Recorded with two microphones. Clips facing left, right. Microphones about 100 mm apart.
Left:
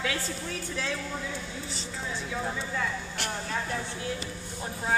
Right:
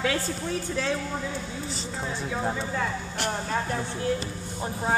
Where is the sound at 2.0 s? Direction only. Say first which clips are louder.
Right 4 dB; 35° right (ahead or behind).